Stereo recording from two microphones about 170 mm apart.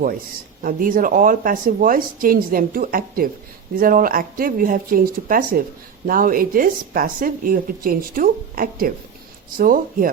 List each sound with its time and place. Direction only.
0.6 s a woman's voice: 55° right (ahead or behind)